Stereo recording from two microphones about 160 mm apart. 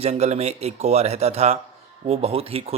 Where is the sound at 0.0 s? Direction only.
45° right (ahead or behind).